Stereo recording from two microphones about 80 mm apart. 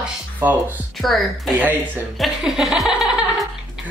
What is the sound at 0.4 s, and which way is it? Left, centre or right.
Speech, right.